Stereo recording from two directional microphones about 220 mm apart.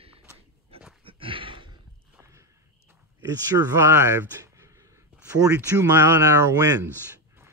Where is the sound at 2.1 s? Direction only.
15° right (ahead or behind).